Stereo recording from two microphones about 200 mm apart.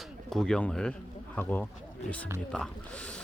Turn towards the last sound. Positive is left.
turn(degrees=5)  # may be behind; listen again after turning